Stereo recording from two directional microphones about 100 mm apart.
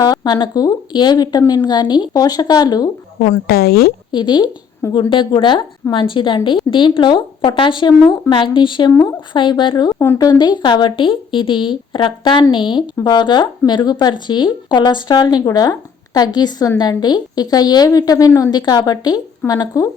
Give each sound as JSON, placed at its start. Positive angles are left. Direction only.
{"t": 0.0, "sound": "a woman's voice", "side_deg": 45}
{"t": 4.1, "sound": "speech", "side_deg": 50}
{"t": 9.9, "sound": "speech", "side_deg": 20}
{"t": 10.2, "sound": "a woman's voice", "side_deg": 40}